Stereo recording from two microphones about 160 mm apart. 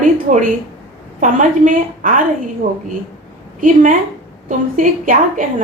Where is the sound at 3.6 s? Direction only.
55° right (ahead or behind).